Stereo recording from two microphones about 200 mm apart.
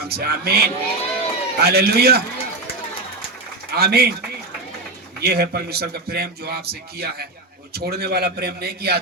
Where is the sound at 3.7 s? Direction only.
55° right (ahead or behind).